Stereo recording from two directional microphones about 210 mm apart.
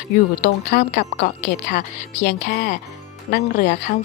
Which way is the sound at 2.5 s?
50° left (ahead or behind).